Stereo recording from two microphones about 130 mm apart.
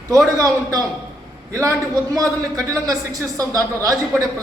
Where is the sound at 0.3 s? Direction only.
25° right (ahead or behind).